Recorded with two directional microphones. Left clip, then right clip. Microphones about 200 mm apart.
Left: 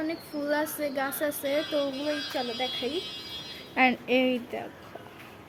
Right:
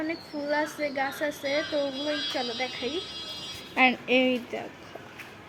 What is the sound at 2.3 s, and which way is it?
Speech, 5° left (ahead or behind).